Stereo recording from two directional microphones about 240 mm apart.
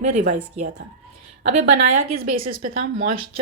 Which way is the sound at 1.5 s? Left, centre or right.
Right.